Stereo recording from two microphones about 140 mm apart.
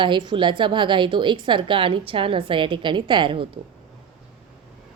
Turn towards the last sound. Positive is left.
turn(degrees=-35)  # may be behind; listen again after turning